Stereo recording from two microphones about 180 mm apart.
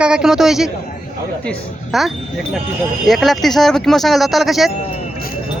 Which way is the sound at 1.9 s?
Centre (ahead or behind).